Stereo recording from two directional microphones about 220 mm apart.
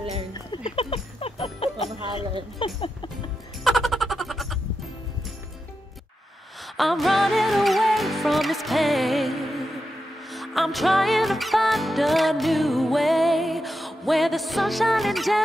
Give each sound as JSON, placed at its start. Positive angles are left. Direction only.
{"t": 0.7, "sound": "music", "side_deg": 25}
{"t": 2.6, "sound": "speech", "side_deg": 25}
{"t": 3.6, "sound": "music", "side_deg": 0}
{"t": 6.8, "sound": "music", "side_deg": 0}